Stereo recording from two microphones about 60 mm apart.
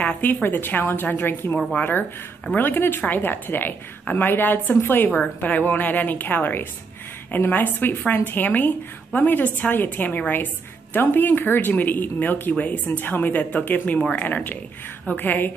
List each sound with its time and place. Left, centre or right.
0.0 s a woman's voice: left
5.1 s a woman's voice: left